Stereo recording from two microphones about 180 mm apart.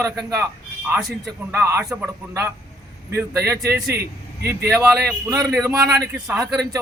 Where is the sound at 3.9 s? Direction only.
60° right (ahead or behind).